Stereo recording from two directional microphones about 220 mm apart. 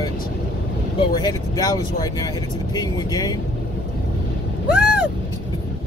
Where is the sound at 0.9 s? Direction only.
20° left (ahead or behind).